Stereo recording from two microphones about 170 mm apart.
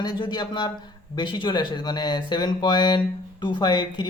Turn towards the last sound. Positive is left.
turn(degrees=25)  # may be behind; listen again after turning